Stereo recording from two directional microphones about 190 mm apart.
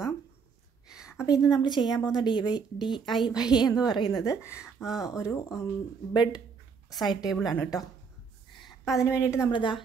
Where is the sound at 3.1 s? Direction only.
Centre (ahead or behind).